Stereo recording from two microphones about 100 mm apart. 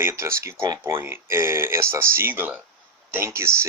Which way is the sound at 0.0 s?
25° right (ahead or behind).